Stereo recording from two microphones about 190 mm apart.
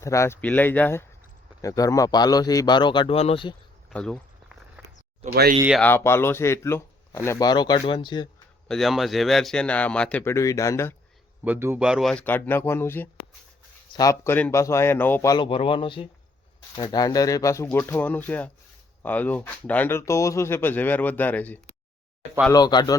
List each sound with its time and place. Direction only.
0.0 s a man's voice: 15° left (ahead or behind)
3.8 s a sound: 5° left (ahead or behind)
4.8 s a sound: 10° right (ahead or behind)
5.2 s speech: 50° right (ahead or behind)
5.8 s speech: 10° left (ahead or behind)
8.6 s a man's voice: centre (ahead or behind)
11.4 s speech: 10° right (ahead or behind); by 21.6 s 10° left (ahead or behind)
22.5 s a man's voice: 20° left (ahead or behind)